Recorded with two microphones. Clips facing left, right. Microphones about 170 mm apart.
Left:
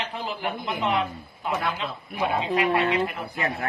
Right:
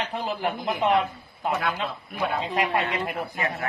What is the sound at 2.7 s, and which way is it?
Speech, 40° left (ahead or behind).